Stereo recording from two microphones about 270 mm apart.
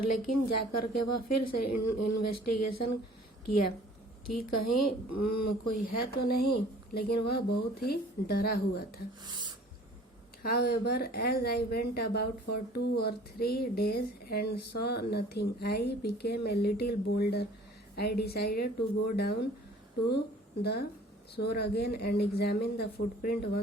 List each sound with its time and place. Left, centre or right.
0.0 s a woman's voice: left
5.7 s speech: left
10.4 s speech: left